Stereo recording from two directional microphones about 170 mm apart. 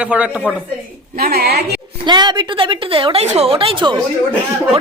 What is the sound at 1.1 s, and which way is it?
Speech, 60° right (ahead or behind).